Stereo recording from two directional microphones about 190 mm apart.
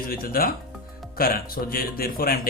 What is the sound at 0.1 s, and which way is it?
A man's voice, 50° left (ahead or behind).